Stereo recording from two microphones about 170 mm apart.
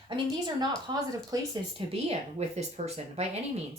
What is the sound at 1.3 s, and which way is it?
Speech, 20° right (ahead or behind).